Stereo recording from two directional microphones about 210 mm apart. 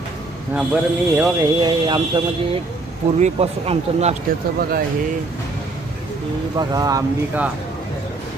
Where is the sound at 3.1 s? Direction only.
30° right (ahead or behind).